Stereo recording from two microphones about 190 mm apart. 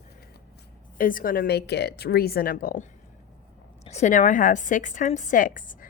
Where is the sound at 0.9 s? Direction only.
45° left (ahead or behind).